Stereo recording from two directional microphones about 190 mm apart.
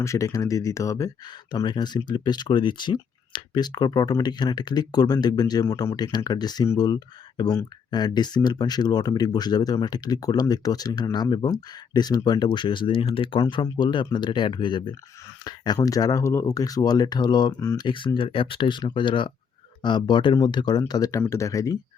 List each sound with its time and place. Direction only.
0.0 s speech: 15° left (ahead or behind)